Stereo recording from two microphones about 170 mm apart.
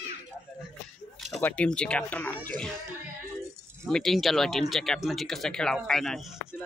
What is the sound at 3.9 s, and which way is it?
Speech, centre (ahead or behind).